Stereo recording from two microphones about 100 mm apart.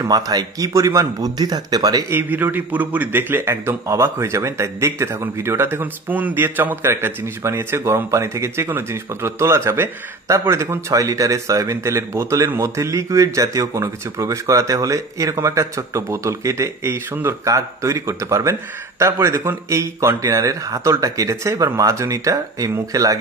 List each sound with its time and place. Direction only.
0.0 s speech: 40° right (ahead or behind)
2.0 s a man's voice: 20° right (ahead or behind); by 23.1 s 35° right (ahead or behind)